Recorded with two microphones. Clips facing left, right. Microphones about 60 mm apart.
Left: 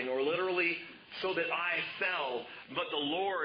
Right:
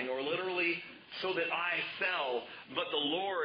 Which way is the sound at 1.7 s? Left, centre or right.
Left.